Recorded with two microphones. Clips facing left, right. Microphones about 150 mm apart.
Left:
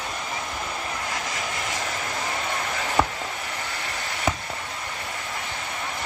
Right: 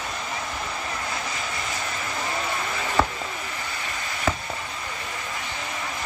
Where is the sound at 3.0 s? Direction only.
15° left (ahead or behind).